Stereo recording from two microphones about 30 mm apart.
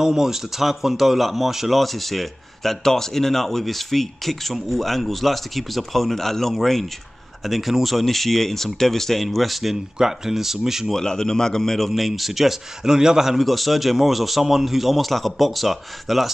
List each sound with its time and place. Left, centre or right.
0.0 s speech: centre
1.7 s speech: centre
9.9 s speech: centre
10.9 s a man's voice: centre
12.1 s speech: centre
12.8 s a man's voice: right
13.4 s speech: centre